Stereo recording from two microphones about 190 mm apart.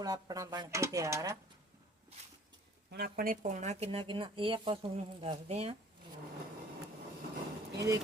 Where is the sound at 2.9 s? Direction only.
50° right (ahead or behind); by 5.7 s 30° right (ahead or behind).